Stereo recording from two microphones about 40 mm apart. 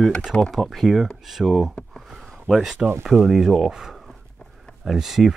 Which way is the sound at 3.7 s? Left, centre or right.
Centre.